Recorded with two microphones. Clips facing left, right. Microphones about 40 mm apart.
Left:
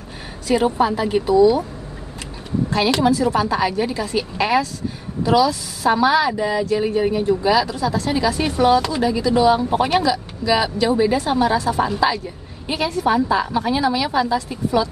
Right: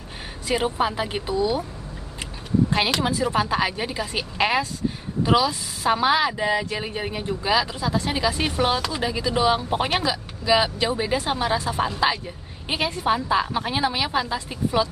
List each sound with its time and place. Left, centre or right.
0.5 s speech: right
3.0 s speech: right